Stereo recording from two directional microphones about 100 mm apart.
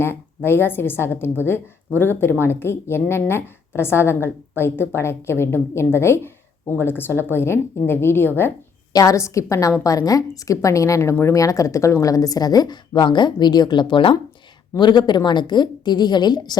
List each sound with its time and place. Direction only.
0.0 s a woman's voice: 25° left (ahead or behind)
8.9 s a woman's voice: 35° left (ahead or behind)